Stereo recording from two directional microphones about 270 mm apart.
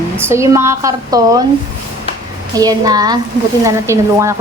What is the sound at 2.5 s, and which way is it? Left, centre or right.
Speech, centre.